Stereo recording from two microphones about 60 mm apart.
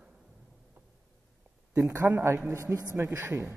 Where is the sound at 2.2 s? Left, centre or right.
Right.